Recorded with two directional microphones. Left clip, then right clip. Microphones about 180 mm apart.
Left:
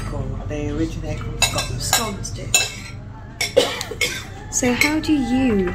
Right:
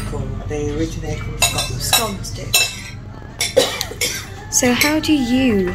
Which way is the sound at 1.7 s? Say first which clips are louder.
Right 4 dB; 25° right (ahead or behind).